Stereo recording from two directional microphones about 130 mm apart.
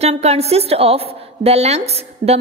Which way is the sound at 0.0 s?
55° right (ahead or behind).